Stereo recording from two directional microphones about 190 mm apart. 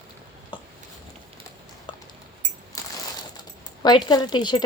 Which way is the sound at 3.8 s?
25° left (ahead or behind).